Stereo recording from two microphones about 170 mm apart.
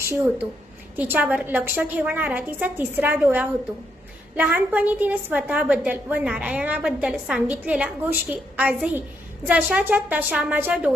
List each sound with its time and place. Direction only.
0.9 s a woman's voice: 10° right (ahead or behind)